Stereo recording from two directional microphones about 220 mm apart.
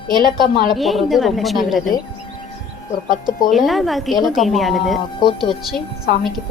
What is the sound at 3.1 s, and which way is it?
Speech, 40° left (ahead or behind).